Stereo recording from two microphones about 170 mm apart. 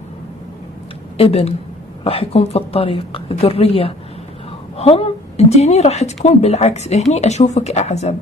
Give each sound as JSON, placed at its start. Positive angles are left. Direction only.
{"t": 1.1, "sound": "a woman's voice", "side_deg": 35}